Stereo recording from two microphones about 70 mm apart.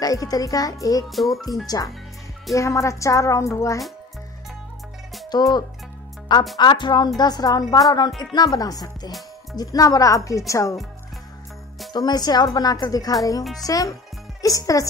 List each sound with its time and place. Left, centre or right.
0.0 s a child's voice: left
1.1 s a child's voice: centre
2.5 s speech: left
5.3 s a woman's voice: left
11.9 s speech: left
12.5 s a child's voice: left
13.4 s a child's voice: centre
13.7 s a child's voice: left